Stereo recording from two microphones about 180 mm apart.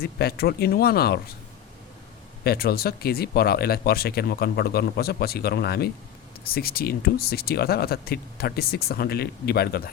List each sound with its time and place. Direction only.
0.0 s speech: 60° left (ahead or behind)
2.4 s speech: 60° left (ahead or behind)